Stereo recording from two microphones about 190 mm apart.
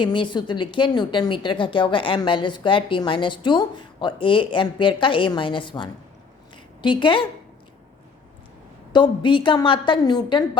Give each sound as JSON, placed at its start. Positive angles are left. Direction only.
{"t": 0.0, "sound": "a woman's voice", "side_deg": 25}
{"t": 8.9, "sound": "a woman's voice", "side_deg": 25}